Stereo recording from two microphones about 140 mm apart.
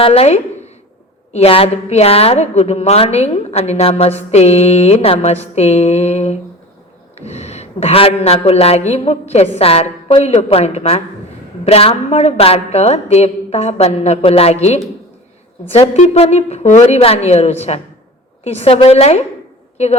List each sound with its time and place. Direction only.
0.0 s a woman's voice: 45° left (ahead or behind)